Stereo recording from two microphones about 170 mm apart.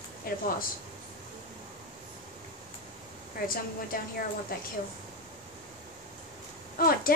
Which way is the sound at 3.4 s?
60° left (ahead or behind).